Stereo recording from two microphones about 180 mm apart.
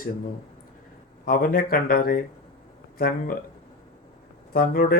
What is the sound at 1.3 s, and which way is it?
Speech, 55° left (ahead or behind).